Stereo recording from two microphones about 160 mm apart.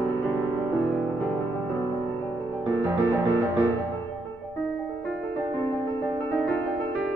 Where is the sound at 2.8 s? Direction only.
20° right (ahead or behind).